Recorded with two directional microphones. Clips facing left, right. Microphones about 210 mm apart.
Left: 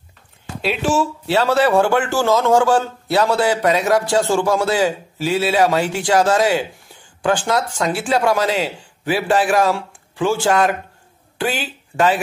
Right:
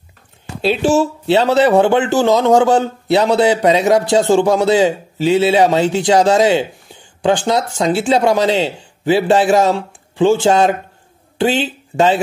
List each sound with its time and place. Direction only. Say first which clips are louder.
0.6 s speech: right 5 dB; 30° right (ahead or behind)